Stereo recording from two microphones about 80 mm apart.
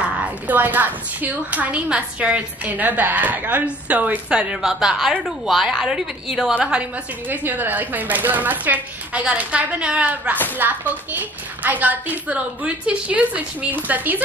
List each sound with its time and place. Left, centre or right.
0.0 s a woman's voice: centre
6.5 s a woman's voice: centre